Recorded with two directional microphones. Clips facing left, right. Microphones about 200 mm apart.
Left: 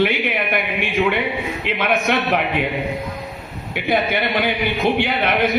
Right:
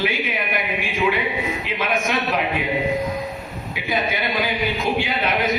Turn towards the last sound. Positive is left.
turn(degrees=60)  # may be behind; listen again after turning